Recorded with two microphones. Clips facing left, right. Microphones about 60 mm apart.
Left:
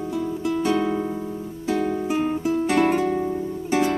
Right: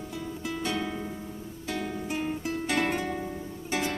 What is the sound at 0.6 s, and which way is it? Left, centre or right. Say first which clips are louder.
Music: left 9 dB; left.